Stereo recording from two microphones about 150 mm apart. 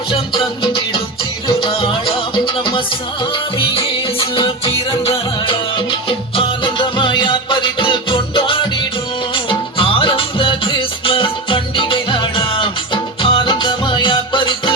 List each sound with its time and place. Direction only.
0.1 s music: 35° left (ahead or behind)
3.6 s music: 35° left (ahead or behind)